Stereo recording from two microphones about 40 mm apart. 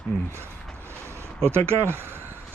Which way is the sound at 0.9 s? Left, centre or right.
Right.